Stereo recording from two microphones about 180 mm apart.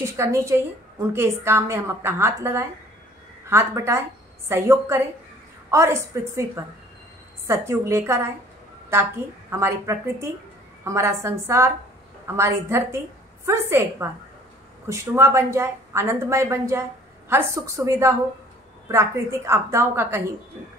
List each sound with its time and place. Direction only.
0.0 s a woman's voice: 15° right (ahead or behind)
9.5 s a woman's voice: 15° right (ahead or behind)